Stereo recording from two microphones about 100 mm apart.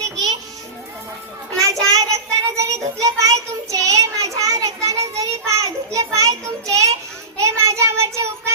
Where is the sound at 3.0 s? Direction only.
35° right (ahead or behind).